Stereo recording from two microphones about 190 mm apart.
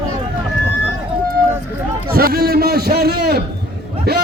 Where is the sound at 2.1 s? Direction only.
55° right (ahead or behind).